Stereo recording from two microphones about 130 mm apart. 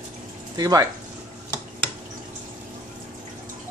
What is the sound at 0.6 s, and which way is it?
Speech, 25° right (ahead or behind).